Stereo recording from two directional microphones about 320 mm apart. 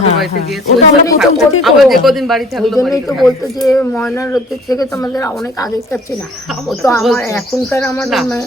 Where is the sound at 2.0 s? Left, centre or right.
Centre.